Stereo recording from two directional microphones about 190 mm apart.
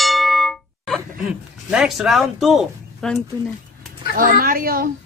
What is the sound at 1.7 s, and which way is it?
Speech, 5° right (ahead or behind).